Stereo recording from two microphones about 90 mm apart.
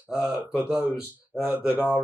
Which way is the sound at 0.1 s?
15° right (ahead or behind).